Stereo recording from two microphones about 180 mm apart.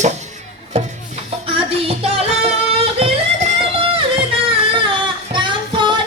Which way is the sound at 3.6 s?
30° right (ahead or behind).